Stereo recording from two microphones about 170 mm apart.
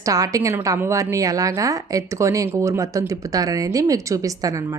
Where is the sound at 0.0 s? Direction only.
20° right (ahead or behind).